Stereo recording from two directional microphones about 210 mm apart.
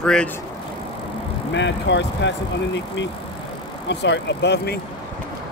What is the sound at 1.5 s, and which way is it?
Speech, 60° left (ahead or behind).